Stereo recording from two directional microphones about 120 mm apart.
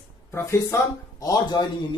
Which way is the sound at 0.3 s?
25° left (ahead or behind).